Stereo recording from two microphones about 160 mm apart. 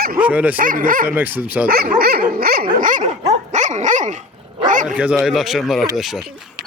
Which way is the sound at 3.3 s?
45° right (ahead or behind).